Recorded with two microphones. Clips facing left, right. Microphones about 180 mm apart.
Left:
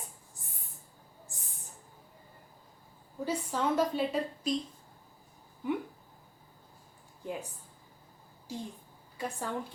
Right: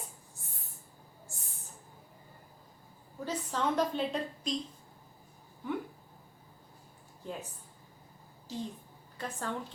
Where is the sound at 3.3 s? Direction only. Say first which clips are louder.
Left 2 dB; 10° left (ahead or behind).